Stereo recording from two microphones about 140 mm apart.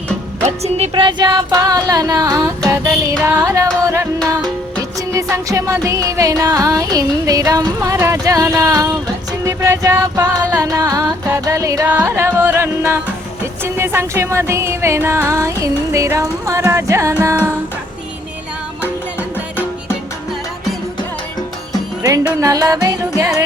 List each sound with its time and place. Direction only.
0.4 s speech: 50° right (ahead or behind)
1.5 s music: 25° right (ahead or behind)
22.4 s music: 25° right (ahead or behind)